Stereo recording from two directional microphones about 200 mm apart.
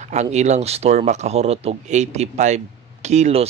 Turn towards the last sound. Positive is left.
turn(degrees=-30)  # may be behind; listen again after turning